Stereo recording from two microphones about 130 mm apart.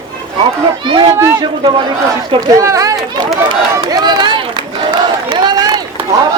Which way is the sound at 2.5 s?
25° right (ahead or behind).